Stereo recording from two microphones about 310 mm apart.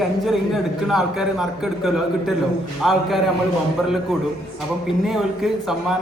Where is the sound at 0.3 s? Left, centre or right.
Centre.